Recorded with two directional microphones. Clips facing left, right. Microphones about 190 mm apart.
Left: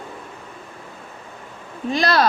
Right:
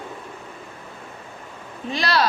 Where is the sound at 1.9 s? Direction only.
45° left (ahead or behind).